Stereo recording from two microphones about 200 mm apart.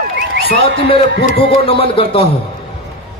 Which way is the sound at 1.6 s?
25° left (ahead or behind).